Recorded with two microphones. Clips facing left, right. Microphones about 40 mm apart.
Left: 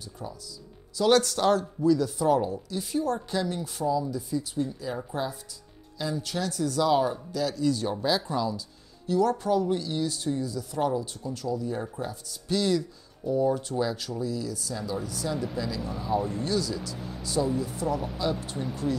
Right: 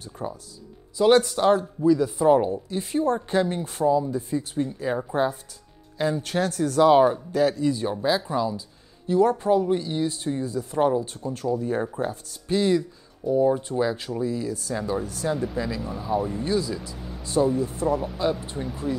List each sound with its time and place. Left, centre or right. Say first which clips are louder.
0.0 s speech: right 6 dB; right
0.9 s speech: right 4 dB; right
7.9 s speech: right 3 dB; centre; by 11.9 s right
11.9 s speech: right 6 dB; right
15.4 s speech: right 4 dB; right
15.8 s speech: even; centre
16.4 s speech: right 3 dB; right
17.2 s speech: right 5 dB; right
18.6 s speech: right 1 dB; centre